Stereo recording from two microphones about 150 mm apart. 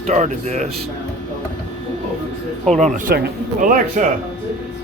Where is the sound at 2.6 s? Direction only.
50° right (ahead or behind).